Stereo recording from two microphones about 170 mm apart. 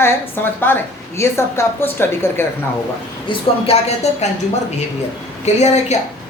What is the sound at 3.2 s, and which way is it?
A woman's voice, 35° left (ahead or behind).